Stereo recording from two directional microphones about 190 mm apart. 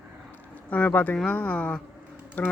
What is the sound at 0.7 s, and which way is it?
Speech, 10° left (ahead or behind).